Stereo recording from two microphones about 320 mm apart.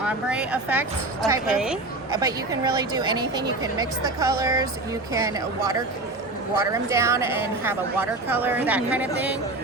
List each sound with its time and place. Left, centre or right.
0.0 s a woman's voice: centre